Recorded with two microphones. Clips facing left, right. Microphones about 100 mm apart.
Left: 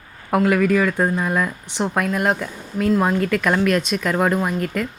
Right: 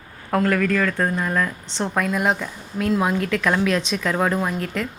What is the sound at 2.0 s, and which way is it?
Speech, centre (ahead or behind).